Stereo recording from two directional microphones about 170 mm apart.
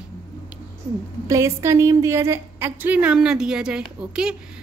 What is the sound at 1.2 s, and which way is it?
A woman's voice, 15° right (ahead or behind).